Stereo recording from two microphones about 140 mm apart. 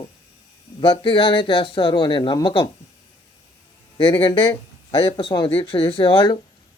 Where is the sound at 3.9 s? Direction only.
35° left (ahead or behind).